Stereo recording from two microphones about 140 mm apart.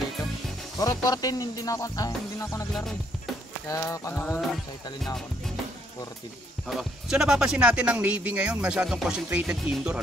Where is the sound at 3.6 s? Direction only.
20° left (ahead or behind).